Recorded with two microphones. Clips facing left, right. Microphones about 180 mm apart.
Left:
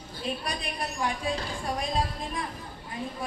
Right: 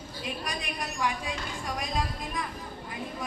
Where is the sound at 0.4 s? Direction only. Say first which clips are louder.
Left 2 dB; 35° left (ahead or behind).